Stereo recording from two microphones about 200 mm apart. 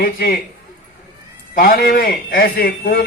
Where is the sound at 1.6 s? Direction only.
45° left (ahead or behind).